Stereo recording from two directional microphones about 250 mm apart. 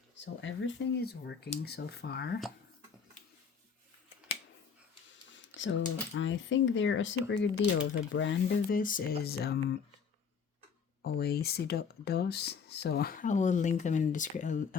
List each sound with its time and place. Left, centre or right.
0.4 s speech: left
5.5 s speech: left
8.5 s speech: left
11.0 s speech: left